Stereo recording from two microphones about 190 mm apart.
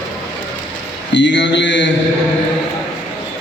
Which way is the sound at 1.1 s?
70° left (ahead or behind).